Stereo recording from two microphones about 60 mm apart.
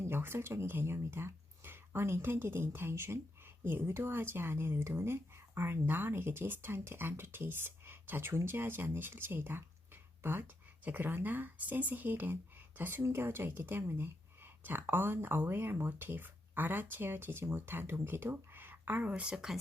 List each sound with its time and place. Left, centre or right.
0.1 s speech: right
13.0 s speech: right
13.2 s speech: right; by 19.5 s centre